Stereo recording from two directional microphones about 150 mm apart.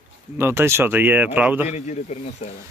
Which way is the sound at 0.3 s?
15° right (ahead or behind).